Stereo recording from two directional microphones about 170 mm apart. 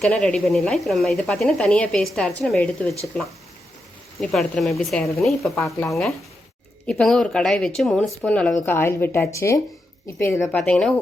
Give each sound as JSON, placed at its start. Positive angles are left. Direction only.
{"t": 0.0, "sound": "speech", "side_deg": 5}
{"t": 4.2, "sound": "speech", "side_deg": 0}
{"t": 6.8, "sound": "a woman's voice", "side_deg": 5}
{"t": 10.5, "sound": "speech", "side_deg": 5}